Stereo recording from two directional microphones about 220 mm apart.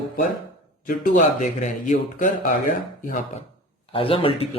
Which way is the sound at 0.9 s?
40° left (ahead or behind).